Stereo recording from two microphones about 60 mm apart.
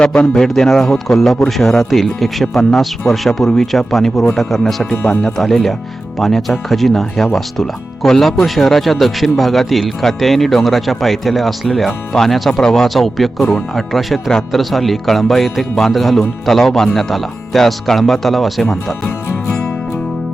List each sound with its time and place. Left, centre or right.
0.0 s speech: centre
4.8 s speech: centre